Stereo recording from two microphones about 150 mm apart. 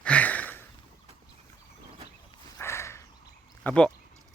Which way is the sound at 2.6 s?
20° left (ahead or behind).